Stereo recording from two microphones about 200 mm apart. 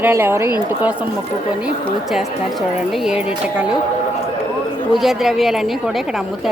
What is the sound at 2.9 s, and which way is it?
Speech, 5° right (ahead or behind).